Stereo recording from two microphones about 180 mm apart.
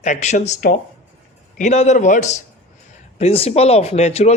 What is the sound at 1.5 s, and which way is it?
Speech, 40° left (ahead or behind).